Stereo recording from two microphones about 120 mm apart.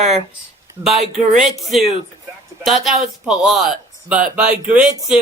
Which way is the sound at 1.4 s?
Centre (ahead or behind).